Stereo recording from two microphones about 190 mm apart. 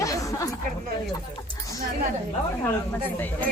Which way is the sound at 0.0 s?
15° left (ahead or behind).